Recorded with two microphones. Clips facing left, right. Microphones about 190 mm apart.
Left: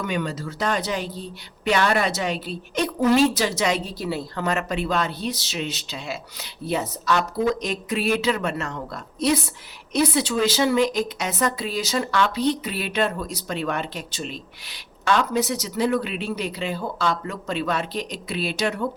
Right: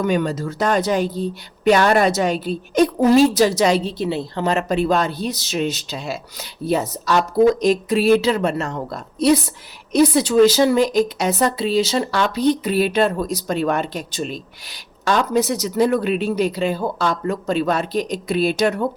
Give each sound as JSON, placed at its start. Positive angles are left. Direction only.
{"t": 0.0, "sound": "speech", "side_deg": -40}